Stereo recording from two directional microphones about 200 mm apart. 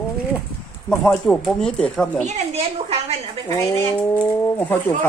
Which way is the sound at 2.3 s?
30° right (ahead or behind).